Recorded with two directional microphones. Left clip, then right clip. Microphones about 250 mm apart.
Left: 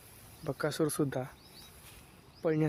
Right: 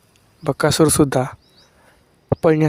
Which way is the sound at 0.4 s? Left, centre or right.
Right.